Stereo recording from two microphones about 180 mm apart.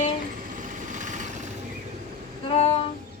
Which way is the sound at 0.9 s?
45° right (ahead or behind).